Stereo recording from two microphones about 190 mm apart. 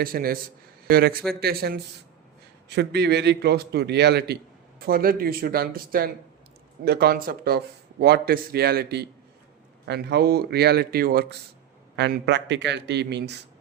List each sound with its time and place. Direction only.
0.0 s speech: 50° right (ahead or behind)
11.9 s speech: 65° right (ahead or behind)